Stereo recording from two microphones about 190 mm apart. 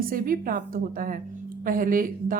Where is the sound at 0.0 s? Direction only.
50° right (ahead or behind).